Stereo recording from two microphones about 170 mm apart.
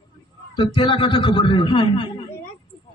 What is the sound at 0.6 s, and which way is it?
A man's voice, 30° left (ahead or behind).